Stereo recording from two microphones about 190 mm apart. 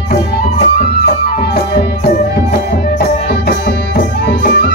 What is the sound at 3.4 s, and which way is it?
Music, 60° left (ahead or behind).